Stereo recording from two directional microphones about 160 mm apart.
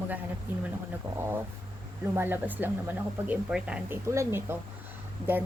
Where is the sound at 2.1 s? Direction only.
15° right (ahead or behind).